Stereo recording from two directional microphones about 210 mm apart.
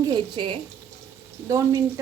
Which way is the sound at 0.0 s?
20° right (ahead or behind).